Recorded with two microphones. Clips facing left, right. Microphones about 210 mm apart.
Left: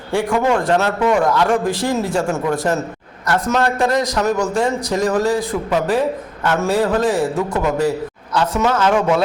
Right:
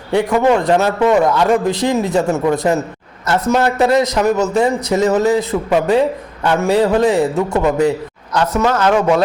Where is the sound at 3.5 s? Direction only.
5° right (ahead or behind).